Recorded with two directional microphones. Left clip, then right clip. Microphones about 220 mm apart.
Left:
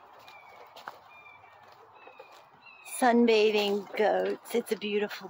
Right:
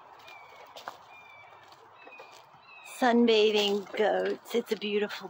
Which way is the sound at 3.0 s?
15° left (ahead or behind).